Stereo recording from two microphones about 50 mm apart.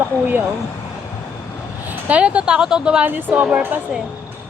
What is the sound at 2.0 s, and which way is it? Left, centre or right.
Speech, right.